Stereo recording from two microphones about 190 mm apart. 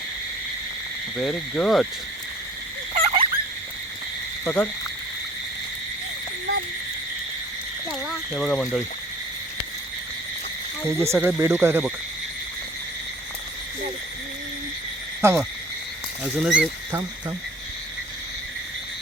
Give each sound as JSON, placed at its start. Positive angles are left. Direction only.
{"t": 1.2, "sound": "speech", "side_deg": 5}
{"t": 2.9, "sound": "a sound", "side_deg": -35}
{"t": 4.4, "sound": "speech", "side_deg": 10}
{"t": 8.0, "sound": "speech", "side_deg": 0}
{"t": 10.8, "sound": "speech", "side_deg": -15}
{"t": 15.2, "sound": "speech", "side_deg": -15}